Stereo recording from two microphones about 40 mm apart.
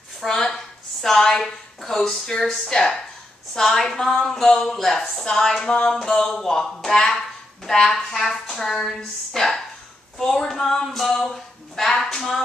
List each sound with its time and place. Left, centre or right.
0.3 s a woman's voice: centre
5.7 s a sound: left
6.0 s a woman's voice: centre